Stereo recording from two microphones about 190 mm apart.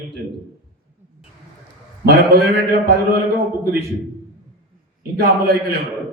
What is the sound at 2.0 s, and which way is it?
A man's voice, 55° right (ahead or behind).